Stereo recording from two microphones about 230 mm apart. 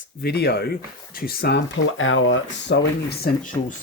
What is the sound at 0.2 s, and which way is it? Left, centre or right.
Speech, left.